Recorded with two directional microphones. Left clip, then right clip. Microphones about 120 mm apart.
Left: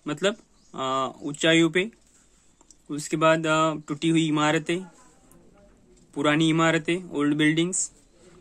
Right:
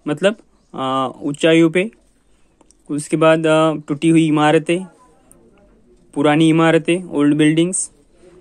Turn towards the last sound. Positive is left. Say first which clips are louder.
# right 8 dB
turn(degrees=-45)  # may be behind; listen again after turning